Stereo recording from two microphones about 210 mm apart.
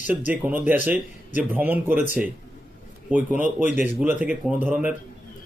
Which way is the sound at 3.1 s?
10° right (ahead or behind).